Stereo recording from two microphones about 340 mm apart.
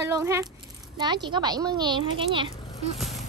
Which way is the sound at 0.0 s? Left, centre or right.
Centre.